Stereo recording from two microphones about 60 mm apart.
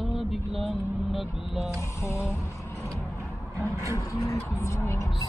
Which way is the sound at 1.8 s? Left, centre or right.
Left.